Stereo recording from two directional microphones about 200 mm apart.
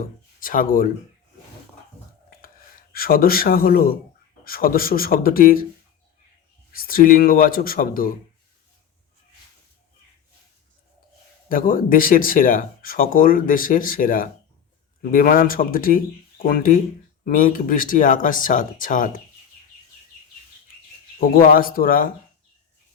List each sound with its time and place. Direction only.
0.3 s speech: 45° left (ahead or behind)
2.9 s speech: 45° left (ahead or behind)
6.7 s speech: 45° left (ahead or behind)
11.4 s speech: 45° left (ahead or behind)
21.3 s speech: 45° left (ahead or behind)